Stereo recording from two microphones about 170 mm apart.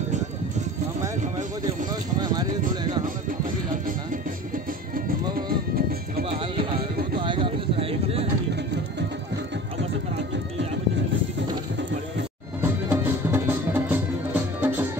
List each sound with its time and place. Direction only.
1.9 s a sound: 25° right (ahead or behind)
2.7 s music: 25° right (ahead or behind)
4.9 s music: 60° right (ahead or behind)
6.2 s music: 35° right (ahead or behind)
7.2 s a sound: 30° right (ahead or behind)
12.9 s music: 10° right (ahead or behind)